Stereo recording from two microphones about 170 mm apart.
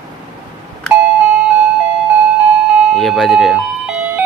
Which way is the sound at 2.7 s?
Centre (ahead or behind).